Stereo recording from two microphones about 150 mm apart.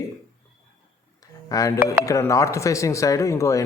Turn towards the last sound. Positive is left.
turn(degrees=20)  # may be behind; listen again after turning